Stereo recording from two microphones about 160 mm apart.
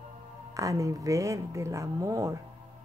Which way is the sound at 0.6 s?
20° right (ahead or behind).